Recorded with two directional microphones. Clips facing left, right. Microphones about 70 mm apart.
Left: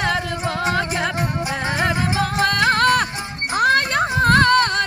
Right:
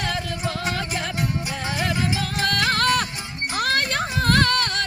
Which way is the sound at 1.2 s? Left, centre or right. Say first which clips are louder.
Left 4 dB; left.